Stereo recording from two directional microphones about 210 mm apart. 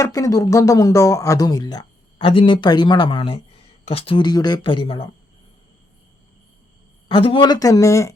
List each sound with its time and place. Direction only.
0.0 s speech: 15° left (ahead or behind)
7.1 s speech: 25° left (ahead or behind)